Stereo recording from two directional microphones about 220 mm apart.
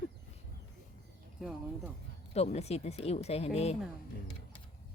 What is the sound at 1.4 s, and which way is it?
Speech, centre (ahead or behind).